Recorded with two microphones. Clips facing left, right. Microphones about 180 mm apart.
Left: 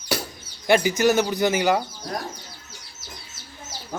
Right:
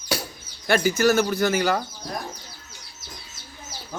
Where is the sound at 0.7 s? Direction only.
20° left (ahead or behind).